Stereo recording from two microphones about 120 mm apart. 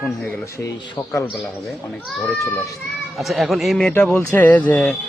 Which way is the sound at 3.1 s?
Centre (ahead or behind).